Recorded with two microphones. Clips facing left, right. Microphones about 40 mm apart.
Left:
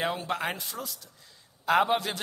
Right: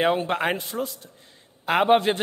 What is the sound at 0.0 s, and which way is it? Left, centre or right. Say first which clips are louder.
A man's voice: right 7 dB; right.